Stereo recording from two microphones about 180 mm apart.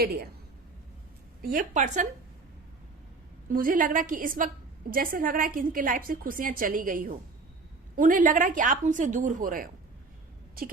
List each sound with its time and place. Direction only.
0.0 s a woman's voice: 60° right (ahead or behind)
1.4 s a woman's voice: 50° right (ahead or behind)
3.5 s a woman's voice: 50° right (ahead or behind)